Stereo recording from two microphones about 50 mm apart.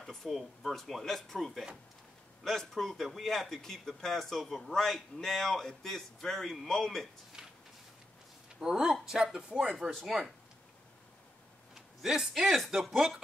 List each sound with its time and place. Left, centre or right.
0.0 s a man's voice: centre
7.4 s a sound: centre
8.5 s speech: centre
10.0 s a man's voice: centre
11.7 s a sound: centre
12.2 s a man's voice: centre